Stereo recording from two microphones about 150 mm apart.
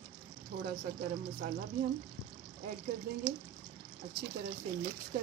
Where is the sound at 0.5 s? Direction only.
60° right (ahead or behind).